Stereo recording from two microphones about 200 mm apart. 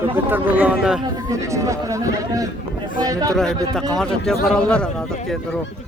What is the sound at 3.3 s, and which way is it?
Speech, centre (ahead or behind).